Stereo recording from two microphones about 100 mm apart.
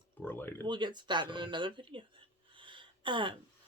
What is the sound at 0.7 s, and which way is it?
A woman's voice, 50° right (ahead or behind).